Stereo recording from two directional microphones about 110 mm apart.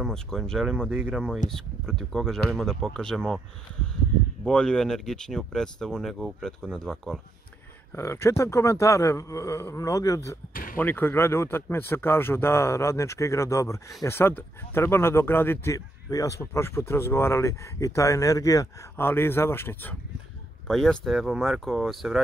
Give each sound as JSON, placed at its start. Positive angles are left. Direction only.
{"t": 0.0, "sound": "speech", "side_deg": 5}
{"t": 4.5, "sound": "speech", "side_deg": 5}
{"t": 7.9, "sound": "speech", "side_deg": 25}
{"t": 18.9, "sound": "speech", "side_deg": 20}
{"t": 20.6, "sound": "speech", "side_deg": 5}